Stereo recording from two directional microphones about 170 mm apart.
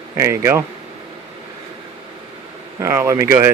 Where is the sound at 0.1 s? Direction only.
15° right (ahead or behind).